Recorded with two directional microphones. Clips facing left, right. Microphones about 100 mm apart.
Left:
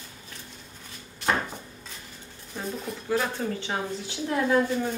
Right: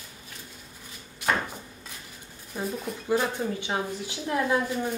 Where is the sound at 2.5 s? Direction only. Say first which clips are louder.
Right 2 dB; 5° right (ahead or behind).